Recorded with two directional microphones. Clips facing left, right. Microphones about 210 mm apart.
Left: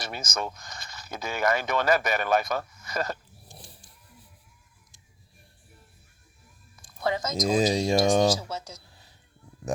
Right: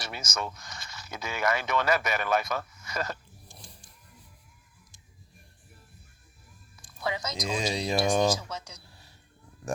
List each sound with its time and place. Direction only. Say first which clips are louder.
0.0 s speech: left 2 dB; 50° left (ahead or behind)
7.0 s speech: left 6 dB; 50° left (ahead or behind)